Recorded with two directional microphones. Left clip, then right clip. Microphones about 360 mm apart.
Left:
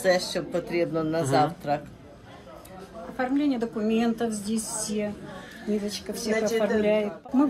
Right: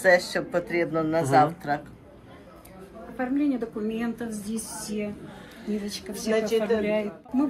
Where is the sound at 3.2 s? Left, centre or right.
Left.